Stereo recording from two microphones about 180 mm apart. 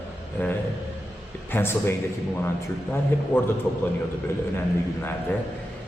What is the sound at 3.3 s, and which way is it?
Speech, 10° left (ahead or behind).